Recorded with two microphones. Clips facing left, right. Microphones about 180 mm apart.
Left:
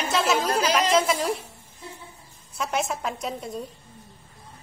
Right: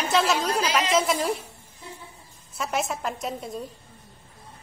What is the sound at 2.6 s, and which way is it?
A woman's voice, centre (ahead or behind).